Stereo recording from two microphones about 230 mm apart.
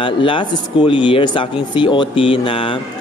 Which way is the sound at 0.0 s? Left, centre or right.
Left.